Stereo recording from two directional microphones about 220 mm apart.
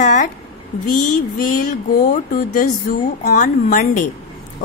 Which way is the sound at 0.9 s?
90° left.